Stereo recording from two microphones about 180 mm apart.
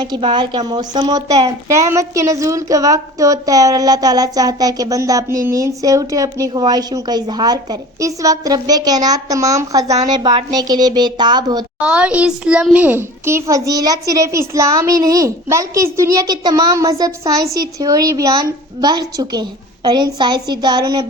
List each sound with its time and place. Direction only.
0.0 s a woman's voice: 25° right (ahead or behind)
11.8 s a child's voice: 5° right (ahead or behind); by 21.1 s 25° right (ahead or behind)